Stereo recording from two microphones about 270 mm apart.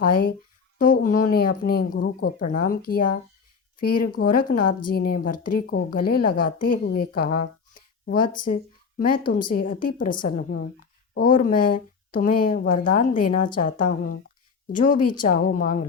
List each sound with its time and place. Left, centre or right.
0.0 s a woman's voice: left